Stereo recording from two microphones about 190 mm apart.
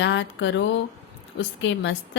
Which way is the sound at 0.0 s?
75° left (ahead or behind).